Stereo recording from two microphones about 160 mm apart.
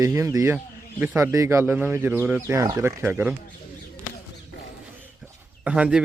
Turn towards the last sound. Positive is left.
turn(degrees=-5)  # may be behind; listen again after turning